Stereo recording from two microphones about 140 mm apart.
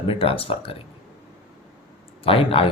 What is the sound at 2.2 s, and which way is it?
Speech, 40° left (ahead or behind).